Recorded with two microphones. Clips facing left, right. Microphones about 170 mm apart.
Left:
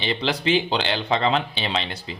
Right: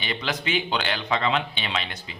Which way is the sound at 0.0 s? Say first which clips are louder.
Left 5 dB; 30° left (ahead or behind).